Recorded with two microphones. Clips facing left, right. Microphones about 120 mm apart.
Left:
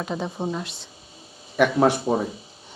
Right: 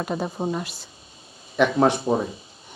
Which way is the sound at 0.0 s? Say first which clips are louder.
Right 1 dB; 5° right (ahead or behind).